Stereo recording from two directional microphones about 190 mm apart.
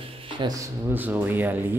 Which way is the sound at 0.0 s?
25° right (ahead or behind).